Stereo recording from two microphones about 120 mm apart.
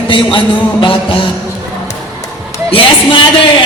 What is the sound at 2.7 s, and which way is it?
Speech, 45° left (ahead or behind).